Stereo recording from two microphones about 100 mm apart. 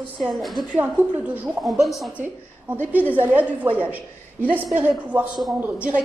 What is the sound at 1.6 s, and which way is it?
Speech, centre (ahead or behind).